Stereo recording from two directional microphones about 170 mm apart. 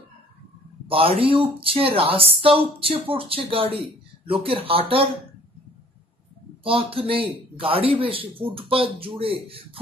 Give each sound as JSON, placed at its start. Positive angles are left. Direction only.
{"t": 0.8, "sound": "a man's voice", "side_deg": -30}
{"t": 6.6, "sound": "speech", "side_deg": -35}